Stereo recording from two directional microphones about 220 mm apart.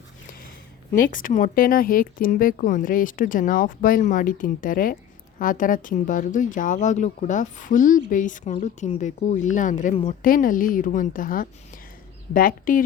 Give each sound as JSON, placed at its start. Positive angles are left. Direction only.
{"t": 1.1, "sound": "speech", "side_deg": 35}